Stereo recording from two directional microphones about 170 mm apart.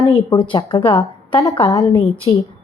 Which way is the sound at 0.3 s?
30° left (ahead or behind).